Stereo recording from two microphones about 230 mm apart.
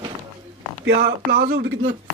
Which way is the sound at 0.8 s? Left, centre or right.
Right.